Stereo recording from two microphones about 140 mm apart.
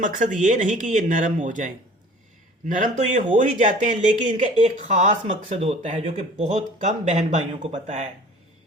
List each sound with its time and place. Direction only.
0.0 s speech: 65° right (ahead or behind)